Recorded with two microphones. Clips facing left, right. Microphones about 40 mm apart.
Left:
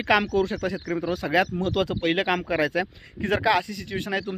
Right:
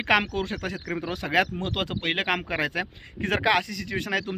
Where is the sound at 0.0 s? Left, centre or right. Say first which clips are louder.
Left 1 dB; right.